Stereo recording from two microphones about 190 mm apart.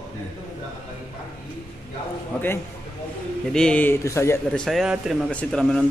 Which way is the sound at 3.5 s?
5° left (ahead or behind).